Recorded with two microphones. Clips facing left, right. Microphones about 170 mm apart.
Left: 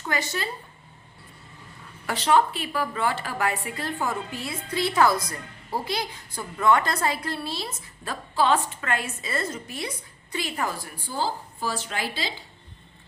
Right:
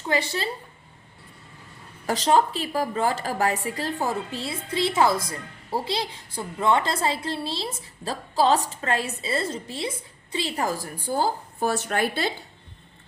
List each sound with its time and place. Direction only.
0.1 s a woman's voice: 30° right (ahead or behind)
2.0 s a woman's voice: 40° right (ahead or behind)
11.0 s speech: 50° right (ahead or behind)